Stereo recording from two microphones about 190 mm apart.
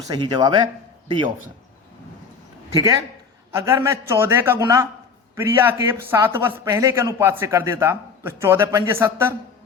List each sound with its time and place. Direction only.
0.1 s speech: 20° right (ahead or behind)
3.5 s speech: 15° right (ahead or behind)